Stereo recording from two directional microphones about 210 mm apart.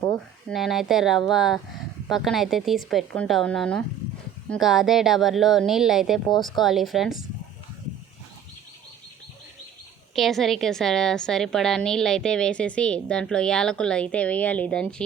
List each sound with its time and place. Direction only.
0.4 s a woman's voice: centre (ahead or behind)
10.2 s a woman's voice: centre (ahead or behind)